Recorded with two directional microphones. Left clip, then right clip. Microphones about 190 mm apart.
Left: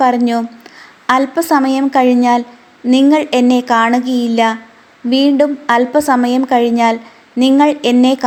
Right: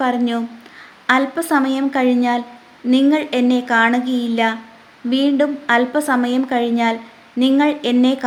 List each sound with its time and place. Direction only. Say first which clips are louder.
0.0 s a woman's voice: left 7 dB; 20° left (ahead or behind)